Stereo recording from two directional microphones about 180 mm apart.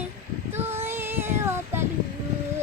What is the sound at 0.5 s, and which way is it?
Child singing, 15° right (ahead or behind).